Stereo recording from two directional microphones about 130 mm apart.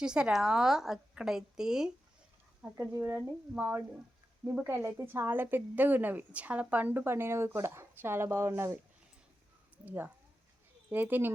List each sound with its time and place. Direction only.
0.0 s a woman's voice: 5° right (ahead or behind)
2.7 s a woman's voice: 20° right (ahead or behind)